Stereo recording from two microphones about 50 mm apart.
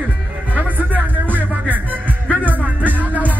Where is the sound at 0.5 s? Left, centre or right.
Right.